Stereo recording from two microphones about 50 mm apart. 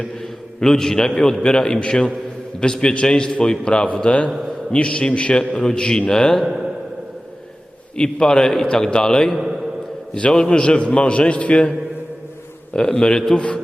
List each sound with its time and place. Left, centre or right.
0.0 s a man's voice: centre
4.3 s a man's voice: centre
4.7 s a man's voice: left
6.4 s a sound: centre
7.9 s a man's voice: centre